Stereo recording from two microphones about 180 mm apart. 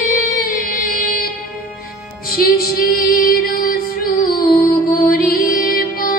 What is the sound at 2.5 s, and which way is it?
Female singing, 55° left (ahead or behind).